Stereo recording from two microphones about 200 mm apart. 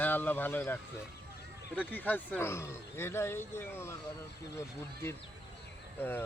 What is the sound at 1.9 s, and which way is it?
Speech, 10° left (ahead or behind).